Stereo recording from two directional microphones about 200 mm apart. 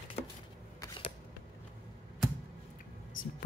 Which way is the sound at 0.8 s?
25° left (ahead or behind).